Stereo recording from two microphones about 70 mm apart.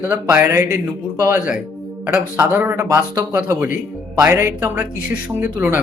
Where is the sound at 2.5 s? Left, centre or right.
Right.